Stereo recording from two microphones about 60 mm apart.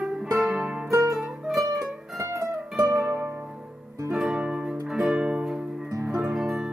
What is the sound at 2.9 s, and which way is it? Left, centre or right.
Music, centre.